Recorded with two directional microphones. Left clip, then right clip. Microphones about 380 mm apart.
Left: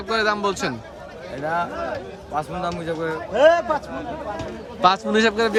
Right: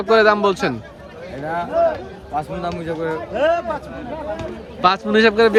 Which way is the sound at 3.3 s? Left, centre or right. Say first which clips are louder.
Left 3 dB; left.